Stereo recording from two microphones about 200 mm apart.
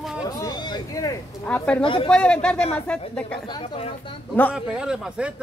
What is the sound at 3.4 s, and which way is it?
Speech, 25° left (ahead or behind).